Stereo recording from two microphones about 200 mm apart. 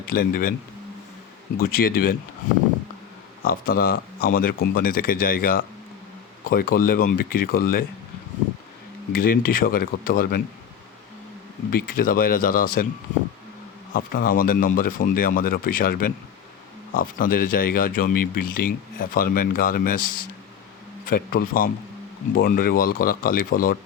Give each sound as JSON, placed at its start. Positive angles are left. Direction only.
{"t": 0.1, "sound": "speech", "side_deg": 45}
{"t": 1.5, "sound": "speech", "side_deg": 50}
{"t": 3.4, "sound": "speech", "side_deg": 50}
{"t": 9.1, "sound": "speech", "side_deg": 45}
{"t": 11.7, "sound": "speech", "side_deg": 45}
{"t": 13.9, "sound": "speech", "side_deg": 45}
{"t": 21.1, "sound": "speech", "side_deg": 45}